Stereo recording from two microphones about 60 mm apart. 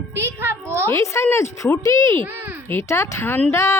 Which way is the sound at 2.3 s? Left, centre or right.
Right.